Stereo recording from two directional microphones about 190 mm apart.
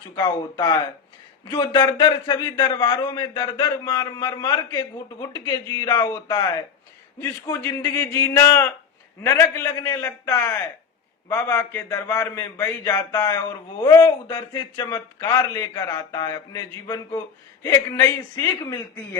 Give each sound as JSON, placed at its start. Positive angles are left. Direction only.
{"t": 0.2, "sound": "a man's voice", "side_deg": 25}